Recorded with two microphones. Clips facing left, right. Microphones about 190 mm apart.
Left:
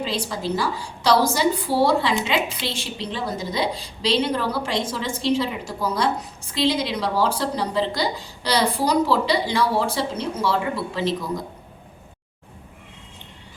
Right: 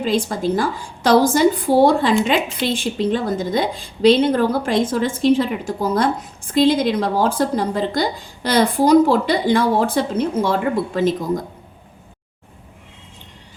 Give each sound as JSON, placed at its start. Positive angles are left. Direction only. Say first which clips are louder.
{"t": 0.0, "sound": "a woman's voice", "louder": "right 7 dB", "side_deg": -50}